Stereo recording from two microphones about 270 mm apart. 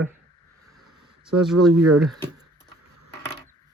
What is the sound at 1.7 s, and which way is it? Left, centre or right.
Speech, right.